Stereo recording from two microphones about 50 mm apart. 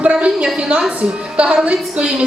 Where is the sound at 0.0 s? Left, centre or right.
Right.